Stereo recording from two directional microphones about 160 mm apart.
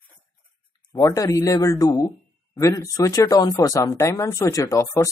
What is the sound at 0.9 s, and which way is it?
A man's voice, 20° left (ahead or behind).